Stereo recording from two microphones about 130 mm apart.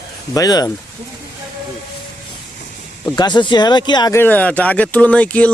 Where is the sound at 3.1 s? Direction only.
35° left (ahead or behind).